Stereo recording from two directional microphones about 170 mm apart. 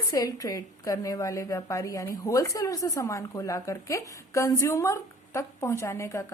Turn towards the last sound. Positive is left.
turn(degrees=15)  # may be behind; listen again after turning